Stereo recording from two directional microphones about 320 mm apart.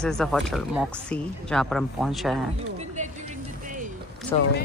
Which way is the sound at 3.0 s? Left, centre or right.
Right.